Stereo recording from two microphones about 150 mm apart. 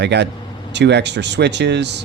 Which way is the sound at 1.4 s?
90° right.